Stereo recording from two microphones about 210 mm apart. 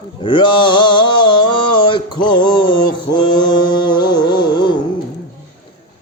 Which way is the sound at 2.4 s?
20° left (ahead or behind).